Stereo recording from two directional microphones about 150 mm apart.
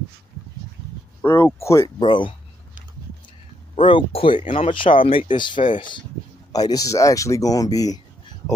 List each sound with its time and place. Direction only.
1.2 s speech: 15° left (ahead or behind)
2.0 s speech: 30° left (ahead or behind)
3.7 s speech: 35° left (ahead or behind)